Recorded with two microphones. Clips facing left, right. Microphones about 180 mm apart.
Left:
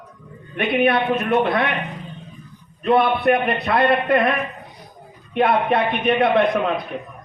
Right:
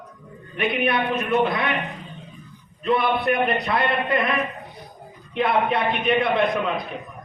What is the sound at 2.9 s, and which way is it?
A man's voice, 55° left (ahead or behind).